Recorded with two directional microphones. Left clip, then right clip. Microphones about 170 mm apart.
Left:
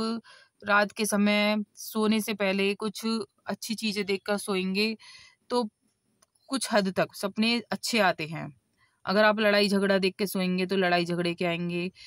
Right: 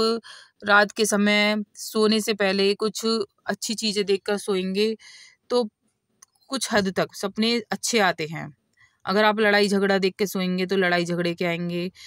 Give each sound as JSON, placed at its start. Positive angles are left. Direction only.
{"t": 0.0, "sound": "speech", "side_deg": -30}